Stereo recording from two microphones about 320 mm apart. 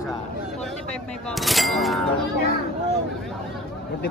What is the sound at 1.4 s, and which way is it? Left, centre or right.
Cattle, centre.